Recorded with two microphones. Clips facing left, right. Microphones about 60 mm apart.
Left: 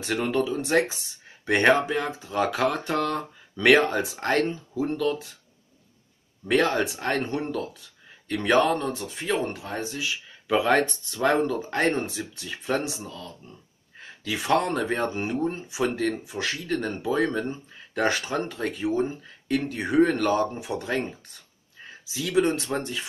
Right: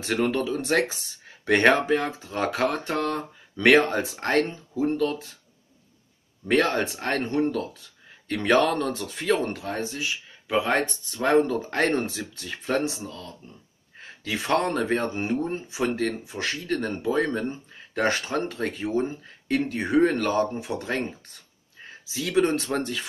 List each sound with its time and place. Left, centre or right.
0.0 s speech: right
6.5 s speech: right
8.5 s speech: right
10.5 s speech: centre
11.4 s speech: right
14.2 s speech: right